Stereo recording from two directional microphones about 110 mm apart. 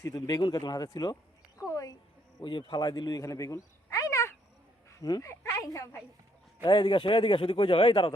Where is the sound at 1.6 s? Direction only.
30° left (ahead or behind).